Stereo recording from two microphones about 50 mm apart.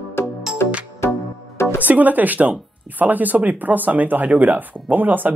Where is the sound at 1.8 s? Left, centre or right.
Right.